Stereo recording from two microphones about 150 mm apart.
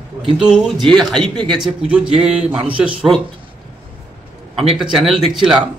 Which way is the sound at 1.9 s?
5° right (ahead or behind).